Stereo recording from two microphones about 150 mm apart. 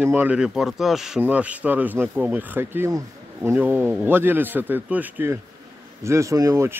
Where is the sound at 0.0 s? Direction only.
10° right (ahead or behind).